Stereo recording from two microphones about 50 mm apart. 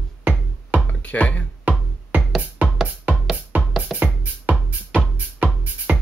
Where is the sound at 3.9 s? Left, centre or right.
Right.